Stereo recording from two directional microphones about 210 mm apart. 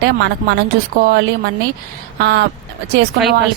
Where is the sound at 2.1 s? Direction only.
55° right (ahead or behind).